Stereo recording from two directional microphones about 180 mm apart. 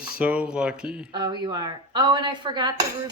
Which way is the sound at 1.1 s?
25° right (ahead or behind).